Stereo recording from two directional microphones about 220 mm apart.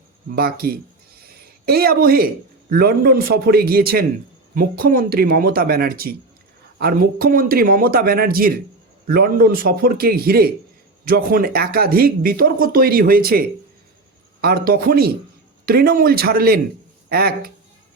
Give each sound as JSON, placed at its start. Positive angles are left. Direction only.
{"t": 0.3, "sound": "a man's voice", "side_deg": -45}
{"t": 14.4, "sound": "speech", "side_deg": -45}